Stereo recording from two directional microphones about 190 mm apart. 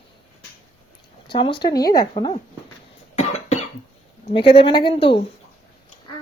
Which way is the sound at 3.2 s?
35° left (ahead or behind).